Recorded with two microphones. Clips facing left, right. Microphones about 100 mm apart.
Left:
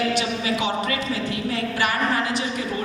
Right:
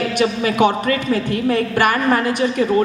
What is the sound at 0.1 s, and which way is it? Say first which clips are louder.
A man's voice: right 5 dB; 55° right (ahead or behind).